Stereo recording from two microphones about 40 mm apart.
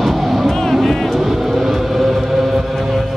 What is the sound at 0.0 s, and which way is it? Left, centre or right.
Vehicle, centre.